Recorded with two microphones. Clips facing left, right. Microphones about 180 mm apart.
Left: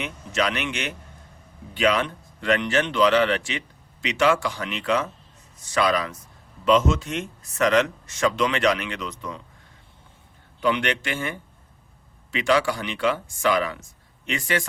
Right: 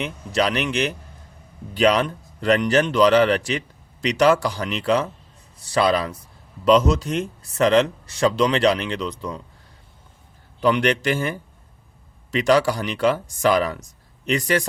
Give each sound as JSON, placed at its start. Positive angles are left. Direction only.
{"t": 0.0, "sound": "speech", "side_deg": -35}
{"t": 10.6, "sound": "speech", "side_deg": -40}